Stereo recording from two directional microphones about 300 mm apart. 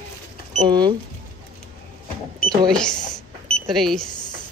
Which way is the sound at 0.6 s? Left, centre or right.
Centre.